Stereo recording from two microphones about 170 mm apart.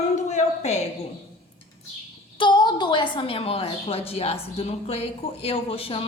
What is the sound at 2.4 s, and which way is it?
A woman's voice, 25° left (ahead or behind).